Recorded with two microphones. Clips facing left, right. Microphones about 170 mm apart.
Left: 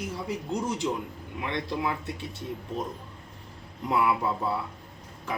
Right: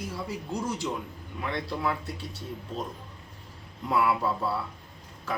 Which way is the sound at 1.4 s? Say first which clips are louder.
Even; 20° left (ahead or behind).